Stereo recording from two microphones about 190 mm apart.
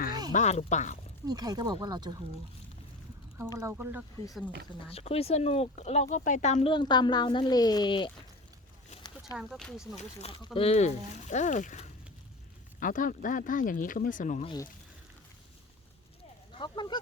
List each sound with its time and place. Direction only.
0.1 s quack: 20° right (ahead or behind)
0.3 s speech: 35° left (ahead or behind)
1.3 s speech: 20° right (ahead or behind)
3.3 s speech: 15° right (ahead or behind)
4.9 s speech: 30° left (ahead or behind)
9.4 s speech: centre (ahead or behind)
10.0 s speech: 30° left (ahead or behind)
14.4 s speech: 20° left (ahead or behind)
16.6 s speech: 25° left (ahead or behind)